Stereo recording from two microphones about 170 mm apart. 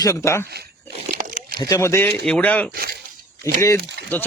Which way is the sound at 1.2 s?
50° right (ahead or behind).